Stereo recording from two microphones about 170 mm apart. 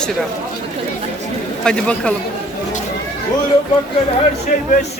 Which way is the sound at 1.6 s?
5° left (ahead or behind).